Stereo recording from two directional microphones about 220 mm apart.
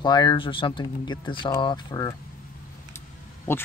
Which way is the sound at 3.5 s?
10° left (ahead or behind).